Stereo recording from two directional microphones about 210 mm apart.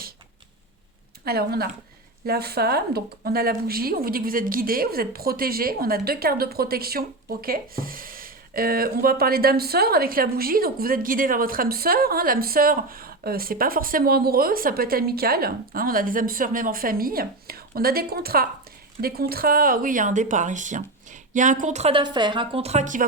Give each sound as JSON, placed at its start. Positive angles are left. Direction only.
{"t": 1.2, "sound": "speech", "side_deg": -50}